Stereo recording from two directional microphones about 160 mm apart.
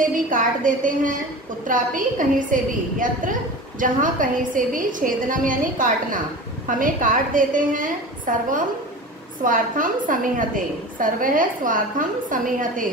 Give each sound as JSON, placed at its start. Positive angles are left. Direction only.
{"t": 0.3, "sound": "a woman's voice", "side_deg": -55}